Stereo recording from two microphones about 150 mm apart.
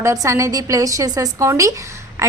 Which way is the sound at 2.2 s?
20° right (ahead or behind).